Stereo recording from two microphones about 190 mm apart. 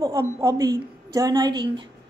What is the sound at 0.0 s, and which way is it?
A woman's voice, 15° right (ahead or behind).